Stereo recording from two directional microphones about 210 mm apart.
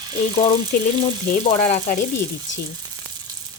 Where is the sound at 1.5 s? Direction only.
30° left (ahead or behind).